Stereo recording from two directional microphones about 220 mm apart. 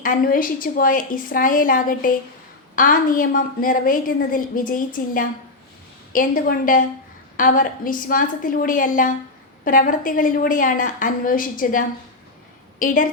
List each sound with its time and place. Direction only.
0.0 s a woman's voice: 40° left (ahead or behind)